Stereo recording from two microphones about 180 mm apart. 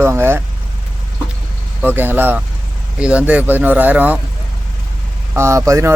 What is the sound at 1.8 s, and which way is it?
Speech, 10° right (ahead or behind).